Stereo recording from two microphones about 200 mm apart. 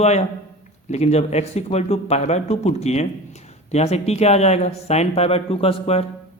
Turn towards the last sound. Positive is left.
turn(degrees=30)  # may be behind; listen again after turning